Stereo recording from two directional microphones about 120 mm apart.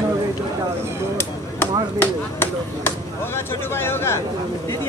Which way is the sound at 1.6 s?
20° left (ahead or behind).